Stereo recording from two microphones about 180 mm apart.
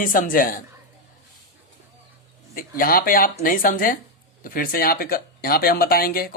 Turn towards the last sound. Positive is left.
turn(degrees=55)  # may be behind; listen again after turning